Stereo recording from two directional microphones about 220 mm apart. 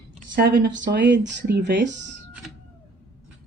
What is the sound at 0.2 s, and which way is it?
Speech, 45° right (ahead or behind).